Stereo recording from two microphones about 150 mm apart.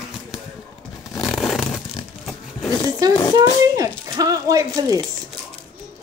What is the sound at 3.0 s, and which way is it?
A woman's voice, 25° right (ahead or behind).